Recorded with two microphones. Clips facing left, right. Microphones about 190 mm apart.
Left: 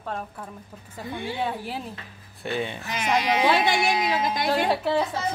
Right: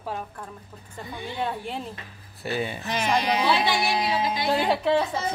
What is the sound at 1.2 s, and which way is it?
A man's voice, 5° left (ahead or behind).